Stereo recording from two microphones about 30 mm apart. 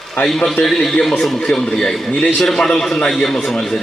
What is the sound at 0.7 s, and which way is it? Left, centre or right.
A man's voice, centre.